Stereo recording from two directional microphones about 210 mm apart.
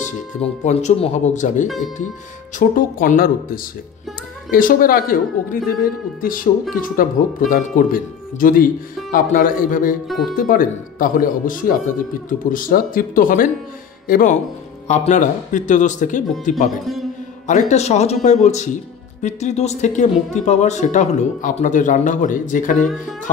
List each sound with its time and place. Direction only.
0.0 s speech: 30° left (ahead or behind)
2.7 s speech: 40° left (ahead or behind)
10.0 s speech: centre (ahead or behind)
10.3 s speech: 40° left (ahead or behind)
16.8 s a man's voice: centre (ahead or behind)
17.5 s speech: 35° left (ahead or behind)